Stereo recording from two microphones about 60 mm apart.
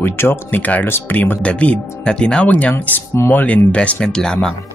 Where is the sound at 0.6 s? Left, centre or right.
Left.